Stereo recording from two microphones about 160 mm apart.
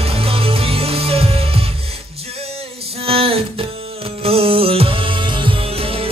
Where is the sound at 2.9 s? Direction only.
35° right (ahead or behind).